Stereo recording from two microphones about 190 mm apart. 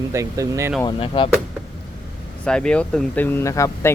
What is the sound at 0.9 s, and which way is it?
Speech, 25° left (ahead or behind).